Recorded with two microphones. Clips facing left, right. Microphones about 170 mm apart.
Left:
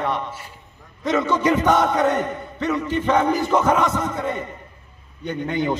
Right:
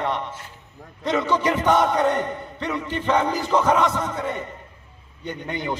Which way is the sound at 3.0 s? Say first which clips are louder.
Left 2 dB; 15° left (ahead or behind).